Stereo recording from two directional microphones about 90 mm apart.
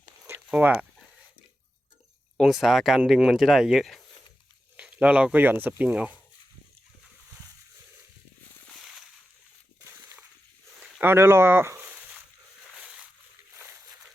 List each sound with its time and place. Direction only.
0.5 s speech: 15° right (ahead or behind)
2.4 s speech: 5° right (ahead or behind)
4.8 s speech: 15° right (ahead or behind)
11.0 s speech: 25° right (ahead or behind)